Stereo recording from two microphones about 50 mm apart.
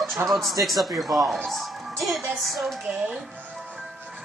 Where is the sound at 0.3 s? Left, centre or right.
Centre.